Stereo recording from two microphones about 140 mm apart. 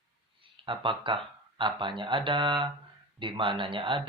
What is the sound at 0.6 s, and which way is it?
Speech, 35° right (ahead or behind).